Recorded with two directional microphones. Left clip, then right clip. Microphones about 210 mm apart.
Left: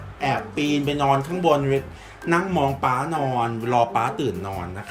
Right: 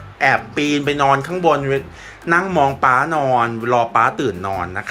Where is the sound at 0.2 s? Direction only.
5° right (ahead or behind).